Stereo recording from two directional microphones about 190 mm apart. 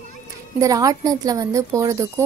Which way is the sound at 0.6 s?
15° right (ahead or behind).